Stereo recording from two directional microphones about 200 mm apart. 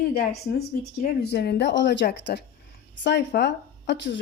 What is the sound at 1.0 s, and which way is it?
Speech, 55° left (ahead or behind).